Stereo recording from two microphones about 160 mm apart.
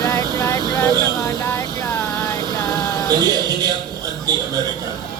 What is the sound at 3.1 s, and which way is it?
Music, 25° right (ahead or behind).